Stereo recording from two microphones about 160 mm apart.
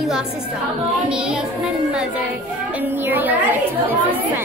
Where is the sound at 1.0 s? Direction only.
5° right (ahead or behind).